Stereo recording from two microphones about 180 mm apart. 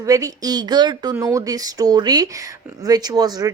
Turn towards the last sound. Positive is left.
turn(degrees=-20)  # may be behind; listen again after turning